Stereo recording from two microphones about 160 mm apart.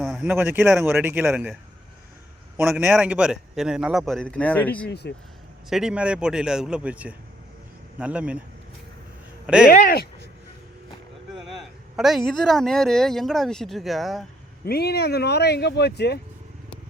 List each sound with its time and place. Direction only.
0.0 s a man's voice: 5° right (ahead or behind)
2.6 s speech: 5° right (ahead or behind)
4.9 s speech: 90° left
5.6 s speech: 5° right (ahead or behind)
9.6 s speech: 65° left (ahead or behind)
11.9 s speech: centre (ahead or behind)
14.6 s speech: 80° left